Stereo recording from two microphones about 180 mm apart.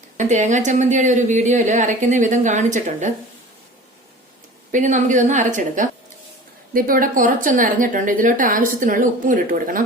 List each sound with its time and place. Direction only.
0.2 s a woman's voice: 45° right (ahead or behind)
4.7 s a woman's voice: 45° right (ahead or behind)